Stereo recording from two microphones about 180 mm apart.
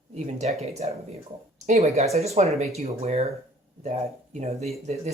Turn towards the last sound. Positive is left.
turn(degrees=-35)  # may be behind; listen again after turning